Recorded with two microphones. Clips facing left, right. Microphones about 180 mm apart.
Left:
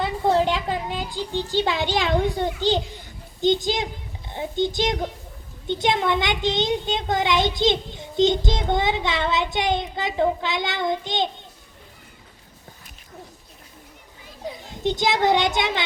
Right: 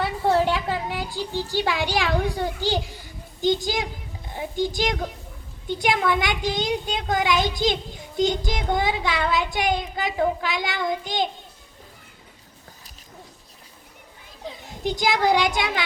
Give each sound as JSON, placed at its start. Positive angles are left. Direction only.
{"t": 0.0, "sound": "a child's voice", "side_deg": 20}
{"t": 14.8, "sound": "a child's voice", "side_deg": 20}